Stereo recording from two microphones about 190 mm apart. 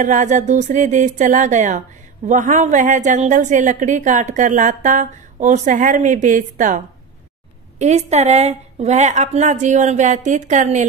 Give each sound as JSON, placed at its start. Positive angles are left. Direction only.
{"t": 0.0, "sound": "a woman's voice", "side_deg": -40}
{"t": 7.8, "sound": "a woman's voice", "side_deg": -35}